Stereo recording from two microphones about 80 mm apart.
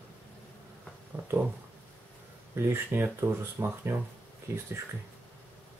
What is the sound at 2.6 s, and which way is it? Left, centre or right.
Speech, right.